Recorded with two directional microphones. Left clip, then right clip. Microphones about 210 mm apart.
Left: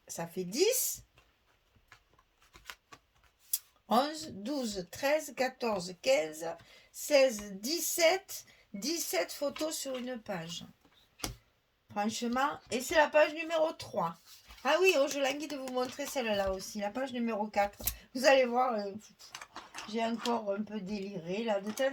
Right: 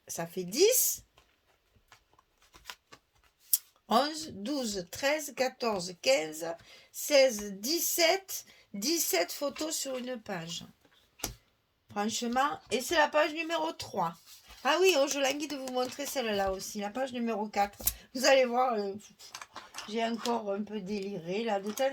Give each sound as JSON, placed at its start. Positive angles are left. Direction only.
{"t": 0.1, "sound": "speech", "side_deg": -40}
{"t": 3.5, "sound": "speech", "side_deg": -40}
{"t": 11.9, "sound": "speech", "side_deg": -40}
{"t": 19.3, "sound": "a sound", "side_deg": -20}
{"t": 20.7, "sound": "speech", "side_deg": -40}